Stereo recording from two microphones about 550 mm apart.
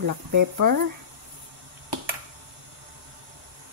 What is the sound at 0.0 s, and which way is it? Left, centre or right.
Speech, right.